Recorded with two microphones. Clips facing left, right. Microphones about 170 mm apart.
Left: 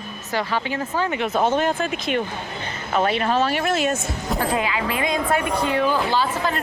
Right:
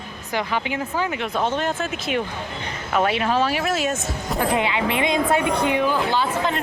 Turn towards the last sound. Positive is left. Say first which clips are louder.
# even
turn(degrees=-20)  # may be behind; listen again after turning